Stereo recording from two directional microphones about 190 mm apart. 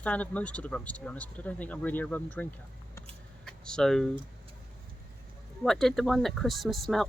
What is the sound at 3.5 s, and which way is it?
Speech, 5° left (ahead or behind).